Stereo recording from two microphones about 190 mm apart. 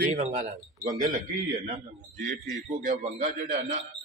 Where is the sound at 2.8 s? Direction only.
40° right (ahead or behind).